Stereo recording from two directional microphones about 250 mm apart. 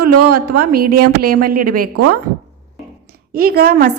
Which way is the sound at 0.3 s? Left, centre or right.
Right.